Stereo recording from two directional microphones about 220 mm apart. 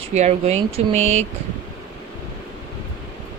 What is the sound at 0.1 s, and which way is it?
Speech, 30° right (ahead or behind).